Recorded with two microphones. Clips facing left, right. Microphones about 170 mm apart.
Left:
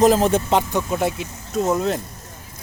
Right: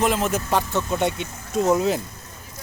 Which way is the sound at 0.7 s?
15° left (ahead or behind).